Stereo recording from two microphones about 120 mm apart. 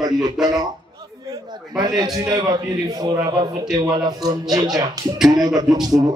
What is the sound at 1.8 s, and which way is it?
A man's voice, 30° right (ahead or behind).